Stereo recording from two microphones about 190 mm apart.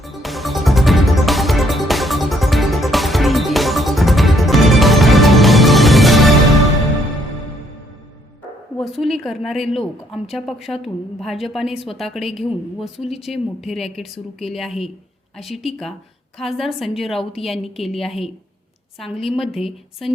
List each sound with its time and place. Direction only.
0.0 s music: centre (ahead or behind)
8.8 s a woman's voice: centre (ahead or behind)